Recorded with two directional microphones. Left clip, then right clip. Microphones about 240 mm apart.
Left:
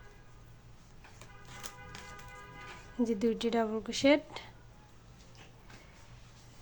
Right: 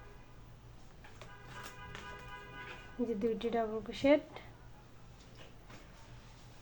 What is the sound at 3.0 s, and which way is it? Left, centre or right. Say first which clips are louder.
A woman's voice: left 3 dB; left.